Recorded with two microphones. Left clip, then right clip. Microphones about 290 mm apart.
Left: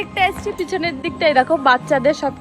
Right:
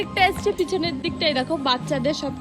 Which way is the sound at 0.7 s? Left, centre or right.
Centre.